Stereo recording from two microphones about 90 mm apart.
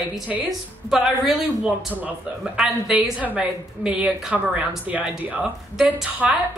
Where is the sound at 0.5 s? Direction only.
5° right (ahead or behind).